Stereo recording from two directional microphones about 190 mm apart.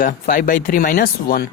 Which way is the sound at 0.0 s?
45° left (ahead or behind).